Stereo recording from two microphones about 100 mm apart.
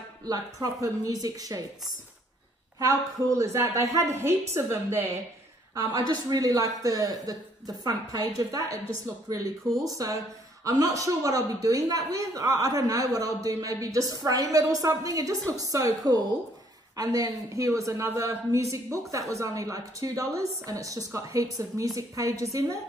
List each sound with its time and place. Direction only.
0.3 s a woman's voice: 35° right (ahead or behind)
2.8 s a woman's voice: 35° right (ahead or behind)
5.8 s a woman's voice: 40° right (ahead or behind)
9.7 s speech: centre (ahead or behind)
9.9 s a woman's voice: 35° right (ahead or behind)